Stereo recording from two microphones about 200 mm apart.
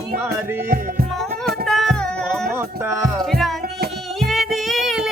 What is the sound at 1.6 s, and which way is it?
Music, centre (ahead or behind).